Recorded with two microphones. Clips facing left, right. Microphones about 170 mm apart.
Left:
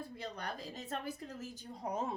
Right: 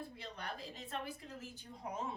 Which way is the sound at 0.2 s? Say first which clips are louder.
Left 4 dB; 40° left (ahead or behind).